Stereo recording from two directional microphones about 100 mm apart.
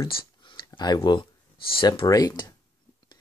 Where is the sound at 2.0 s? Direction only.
40° left (ahead or behind).